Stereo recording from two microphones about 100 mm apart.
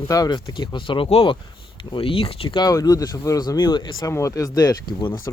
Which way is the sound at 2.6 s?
40° left (ahead or behind).